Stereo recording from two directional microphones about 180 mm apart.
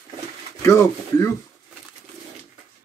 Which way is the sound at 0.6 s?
15° left (ahead or behind).